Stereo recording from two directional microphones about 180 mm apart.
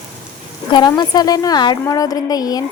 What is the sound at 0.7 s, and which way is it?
Speech, 20° left (ahead or behind).